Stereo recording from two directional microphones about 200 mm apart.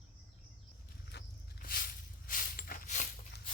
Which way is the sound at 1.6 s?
45° left (ahead or behind).